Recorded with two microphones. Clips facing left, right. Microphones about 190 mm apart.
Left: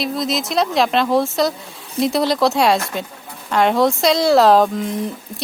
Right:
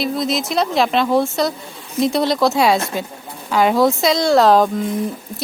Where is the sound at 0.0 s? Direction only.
Centre (ahead or behind).